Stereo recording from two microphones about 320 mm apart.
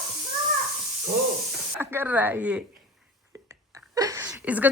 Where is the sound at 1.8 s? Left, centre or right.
Centre.